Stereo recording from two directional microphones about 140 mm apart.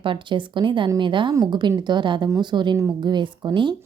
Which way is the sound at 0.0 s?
35° right (ahead or behind).